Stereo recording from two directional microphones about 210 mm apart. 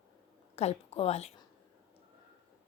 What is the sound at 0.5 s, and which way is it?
Speech, 30° left (ahead or behind).